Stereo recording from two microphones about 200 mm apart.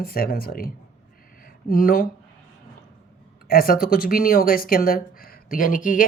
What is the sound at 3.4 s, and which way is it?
Speech, 45° left (ahead or behind).